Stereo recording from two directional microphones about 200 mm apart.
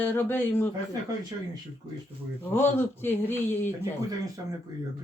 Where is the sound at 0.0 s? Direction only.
10° left (ahead or behind).